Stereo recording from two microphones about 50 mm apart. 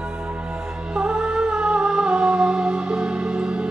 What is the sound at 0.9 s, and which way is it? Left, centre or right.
Music, centre.